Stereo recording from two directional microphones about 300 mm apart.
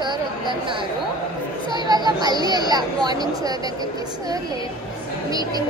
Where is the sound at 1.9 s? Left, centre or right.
Centre.